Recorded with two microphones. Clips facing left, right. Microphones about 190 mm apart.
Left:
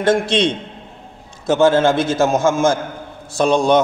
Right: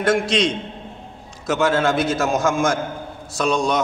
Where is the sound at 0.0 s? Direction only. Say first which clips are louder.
Left 3 dB; 30° left (ahead or behind).